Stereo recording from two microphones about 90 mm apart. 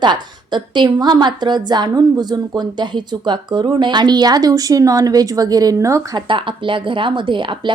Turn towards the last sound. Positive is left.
turn(degrees=-65)  # may be behind; listen again after turning